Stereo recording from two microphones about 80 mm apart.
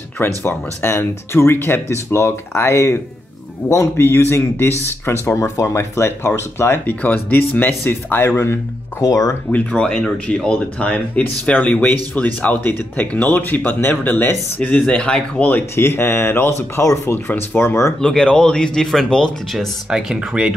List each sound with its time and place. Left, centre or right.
0.4 s speech: left
9.0 s speech: left
9.5 s speech: centre
15.4 s speech: left
18.0 s speech: centre
19.9 s speech: centre